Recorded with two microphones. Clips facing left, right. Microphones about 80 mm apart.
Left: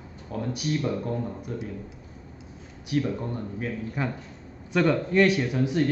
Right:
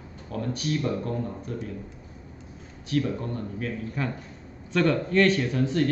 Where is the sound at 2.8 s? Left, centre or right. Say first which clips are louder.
Even; centre.